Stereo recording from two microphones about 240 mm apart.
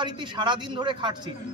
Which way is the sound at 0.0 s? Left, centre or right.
Centre.